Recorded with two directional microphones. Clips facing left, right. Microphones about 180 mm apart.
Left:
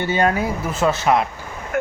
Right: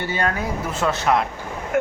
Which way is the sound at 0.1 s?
15° left (ahead or behind).